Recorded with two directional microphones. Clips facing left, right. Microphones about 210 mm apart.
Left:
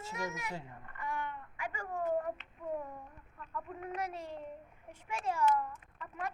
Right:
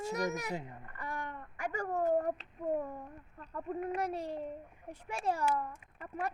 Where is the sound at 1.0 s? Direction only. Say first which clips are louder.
Left 2 dB; 35° right (ahead or behind).